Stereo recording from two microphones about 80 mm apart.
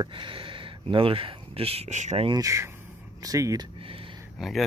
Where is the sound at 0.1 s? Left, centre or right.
Right.